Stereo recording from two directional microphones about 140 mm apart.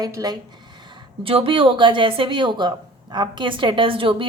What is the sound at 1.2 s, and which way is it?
A woman's voice, 40° right (ahead or behind).